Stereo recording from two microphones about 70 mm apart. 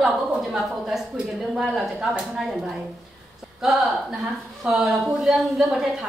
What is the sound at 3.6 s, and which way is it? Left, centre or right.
A woman's voice, centre.